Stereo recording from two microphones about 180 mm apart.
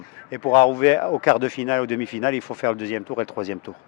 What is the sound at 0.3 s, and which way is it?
Speech, 15° left (ahead or behind).